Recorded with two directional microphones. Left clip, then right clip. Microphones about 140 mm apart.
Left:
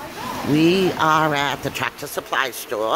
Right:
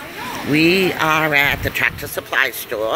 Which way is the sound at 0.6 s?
20° left (ahead or behind).